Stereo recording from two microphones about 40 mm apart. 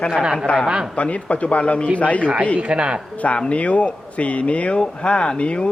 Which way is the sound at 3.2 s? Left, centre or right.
Left.